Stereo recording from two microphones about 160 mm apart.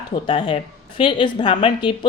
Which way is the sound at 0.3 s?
35° left (ahead or behind).